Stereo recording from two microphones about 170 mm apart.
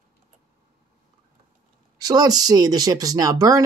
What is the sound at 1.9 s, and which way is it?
Speech, 25° right (ahead or behind).